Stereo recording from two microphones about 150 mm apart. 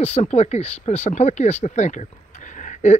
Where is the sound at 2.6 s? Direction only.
50° left (ahead or behind).